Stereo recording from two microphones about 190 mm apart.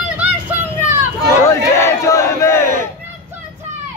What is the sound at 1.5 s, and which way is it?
Battle cry, 15° left (ahead or behind).